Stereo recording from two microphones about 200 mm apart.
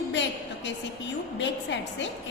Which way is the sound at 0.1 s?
65° left (ahead or behind).